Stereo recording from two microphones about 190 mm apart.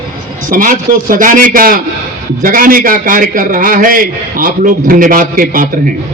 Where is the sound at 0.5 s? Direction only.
45° right (ahead or behind).